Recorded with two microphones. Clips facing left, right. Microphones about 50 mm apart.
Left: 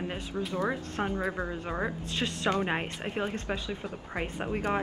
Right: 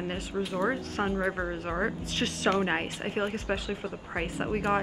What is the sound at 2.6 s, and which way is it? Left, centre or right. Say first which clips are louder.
Speech: right 2 dB; centre.